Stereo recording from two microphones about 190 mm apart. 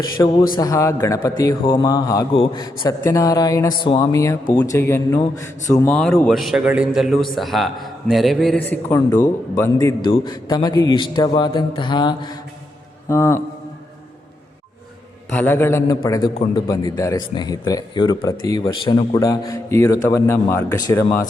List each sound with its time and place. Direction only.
0.2 s speech: 15° left (ahead or behind)
1.5 s mantra: 25° left (ahead or behind)
2.4 s speech: 20° left (ahead or behind)
5.9 s a man's voice: 5° left (ahead or behind); by 10.8 s 20° left (ahead or behind)
10.8 s mantra: 25° left (ahead or behind)
13.1 s speech: 15° left (ahead or behind)
15.3 s speech: 10° left (ahead or behind)